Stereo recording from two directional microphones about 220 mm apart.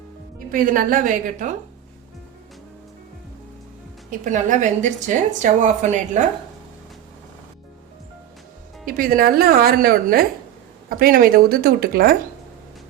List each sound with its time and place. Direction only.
0.3 s a woman's voice: 35° right (ahead or behind)
4.1 s a woman's voice: 35° right (ahead or behind)
8.9 s a woman's voice: 40° right (ahead or behind)